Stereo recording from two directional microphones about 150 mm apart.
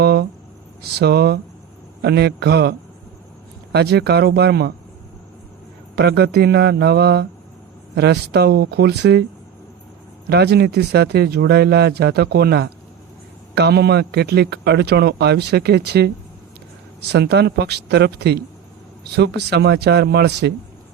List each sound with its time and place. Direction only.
0.0 s a sound: 90° right
0.8 s speech: 90° right
6.1 s speech: 90° right
10.2 s speech: 90° right